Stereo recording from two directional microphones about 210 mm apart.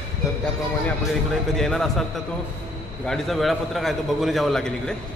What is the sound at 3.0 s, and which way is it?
A man's voice, centre (ahead or behind).